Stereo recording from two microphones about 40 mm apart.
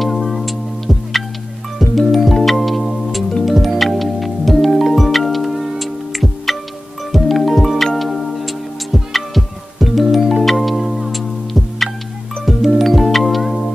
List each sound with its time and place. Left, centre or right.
0.0 s music: centre